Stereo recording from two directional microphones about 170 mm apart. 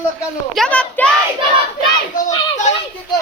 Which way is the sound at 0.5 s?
5° left (ahead or behind).